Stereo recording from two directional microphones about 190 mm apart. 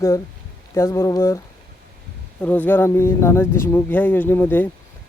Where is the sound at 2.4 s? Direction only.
10° left (ahead or behind).